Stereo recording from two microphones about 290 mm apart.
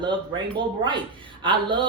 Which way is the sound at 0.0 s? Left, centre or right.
Centre.